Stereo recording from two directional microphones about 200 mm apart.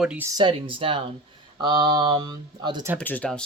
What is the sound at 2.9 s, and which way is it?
Speech, 5° left (ahead or behind).